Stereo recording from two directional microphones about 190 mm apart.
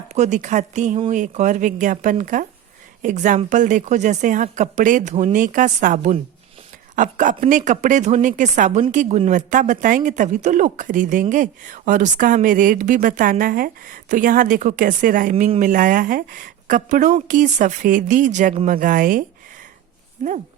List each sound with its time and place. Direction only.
0.1 s speech: 40° right (ahead or behind)